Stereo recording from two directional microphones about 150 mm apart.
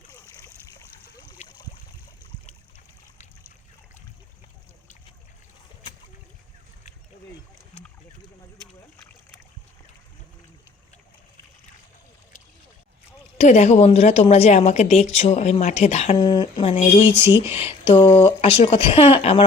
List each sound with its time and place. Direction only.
13.4 s a woman's voice: 50° left (ahead or behind)
16.1 s speech: 30° left (ahead or behind)
16.7 s a woman's voice: 50° left (ahead or behind)
17.6 s speech: 35° left (ahead or behind)